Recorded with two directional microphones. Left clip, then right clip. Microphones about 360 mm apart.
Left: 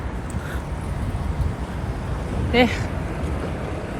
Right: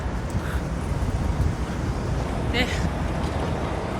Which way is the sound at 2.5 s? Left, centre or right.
Centre.